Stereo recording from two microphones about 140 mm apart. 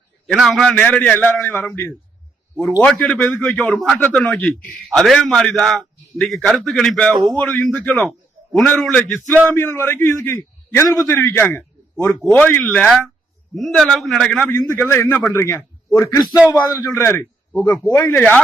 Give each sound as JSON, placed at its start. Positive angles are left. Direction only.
{"t": 0.3, "sound": "a man's voice", "side_deg": 0}
{"t": 12.0, "sound": "a man's voice", "side_deg": 0}
{"t": 14.5, "sound": "a man's voice", "side_deg": 20}
{"t": 18.2, "sound": "a man's voice", "side_deg": 10}